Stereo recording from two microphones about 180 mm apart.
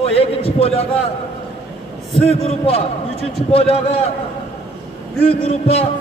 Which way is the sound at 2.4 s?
35° left (ahead or behind).